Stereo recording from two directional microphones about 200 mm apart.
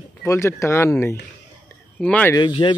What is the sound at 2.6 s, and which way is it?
Speech, 20° left (ahead or behind).